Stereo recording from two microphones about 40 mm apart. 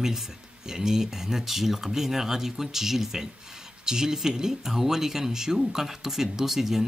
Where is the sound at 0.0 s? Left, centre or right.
Centre.